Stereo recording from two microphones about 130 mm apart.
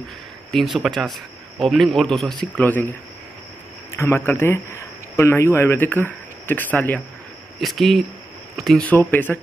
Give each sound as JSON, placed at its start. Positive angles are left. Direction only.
{"t": 0.5, "sound": "a man's voice", "side_deg": 0}
{"t": 3.9, "sound": "a man's voice", "side_deg": 20}
{"t": 7.6, "sound": "a man's voice", "side_deg": 0}
{"t": 8.8, "sound": "speech", "side_deg": 15}